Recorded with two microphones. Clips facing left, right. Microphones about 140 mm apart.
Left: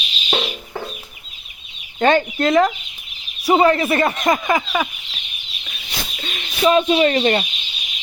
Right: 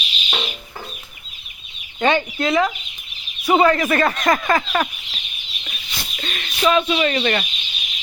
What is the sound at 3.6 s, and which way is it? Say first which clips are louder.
Speech: even; 30° left (ahead or behind).